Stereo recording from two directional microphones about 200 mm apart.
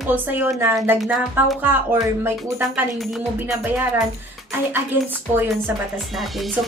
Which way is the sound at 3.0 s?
Centre (ahead or behind).